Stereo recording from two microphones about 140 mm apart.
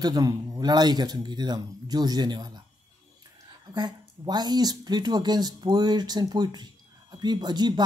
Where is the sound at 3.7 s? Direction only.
30° right (ahead or behind).